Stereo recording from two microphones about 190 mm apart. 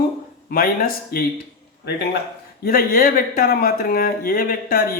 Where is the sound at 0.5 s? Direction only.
50° left (ahead or behind).